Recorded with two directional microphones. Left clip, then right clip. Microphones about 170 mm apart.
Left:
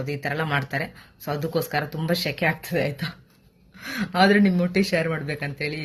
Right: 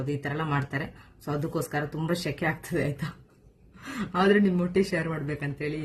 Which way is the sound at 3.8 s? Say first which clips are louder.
Left 6 dB; 15° right (ahead or behind).